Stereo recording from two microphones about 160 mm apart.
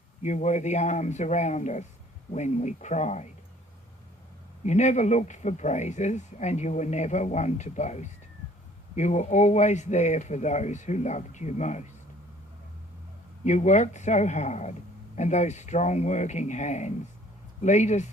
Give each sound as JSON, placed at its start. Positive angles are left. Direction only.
{"t": 0.2, "sound": "a man's voice", "side_deg": 45}
{"t": 4.6, "sound": "a man's voice", "side_deg": 45}
{"t": 13.4, "sound": "a man's voice", "side_deg": 45}